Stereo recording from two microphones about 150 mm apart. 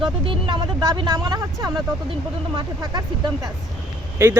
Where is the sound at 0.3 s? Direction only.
35° right (ahead or behind).